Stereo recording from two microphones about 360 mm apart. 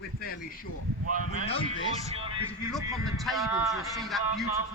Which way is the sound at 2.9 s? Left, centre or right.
Centre.